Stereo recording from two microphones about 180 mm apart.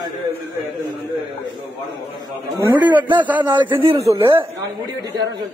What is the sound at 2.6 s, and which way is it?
Speech, 10° right (ahead or behind).